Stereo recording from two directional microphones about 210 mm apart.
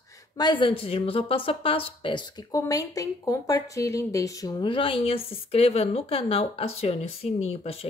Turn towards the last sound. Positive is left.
turn(degrees=30)  # may be behind; listen again after turning